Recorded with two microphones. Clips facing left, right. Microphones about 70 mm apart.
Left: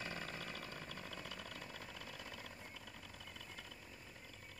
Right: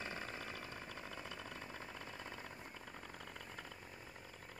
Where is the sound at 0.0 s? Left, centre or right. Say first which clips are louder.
Right 1 dB; right.